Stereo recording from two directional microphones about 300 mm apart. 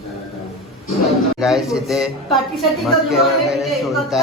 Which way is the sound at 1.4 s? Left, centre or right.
Centre.